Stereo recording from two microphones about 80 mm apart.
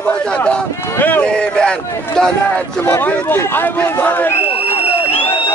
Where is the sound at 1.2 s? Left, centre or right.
Centre.